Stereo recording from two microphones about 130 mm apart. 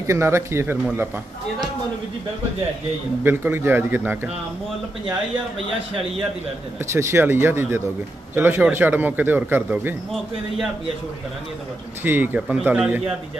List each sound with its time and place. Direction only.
0.0 s speech: 20° right (ahead or behind)
3.3 s a man's voice: 15° right (ahead or behind)
6.9 s a man's voice: 20° right (ahead or behind)
12.0 s a man's voice: 15° right (ahead or behind)